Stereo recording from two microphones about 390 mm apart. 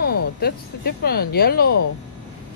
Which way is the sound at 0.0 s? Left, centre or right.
Left.